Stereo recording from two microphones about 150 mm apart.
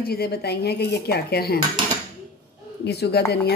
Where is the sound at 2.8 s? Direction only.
90° left.